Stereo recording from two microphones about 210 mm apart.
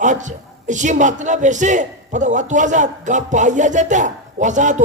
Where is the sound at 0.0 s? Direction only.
35° right (ahead or behind).